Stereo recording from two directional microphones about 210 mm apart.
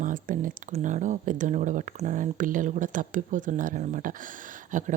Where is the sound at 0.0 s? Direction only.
40° right (ahead or behind).